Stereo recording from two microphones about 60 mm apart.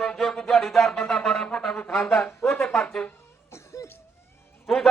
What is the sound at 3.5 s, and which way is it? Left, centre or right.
Cough, left.